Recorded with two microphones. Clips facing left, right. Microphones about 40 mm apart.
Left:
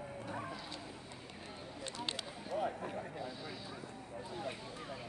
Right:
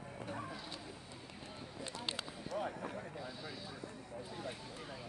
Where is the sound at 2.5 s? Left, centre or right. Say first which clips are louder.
Left 3 dB; left.